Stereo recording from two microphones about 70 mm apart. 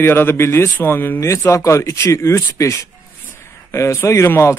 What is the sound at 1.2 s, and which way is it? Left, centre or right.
A man's voice, left.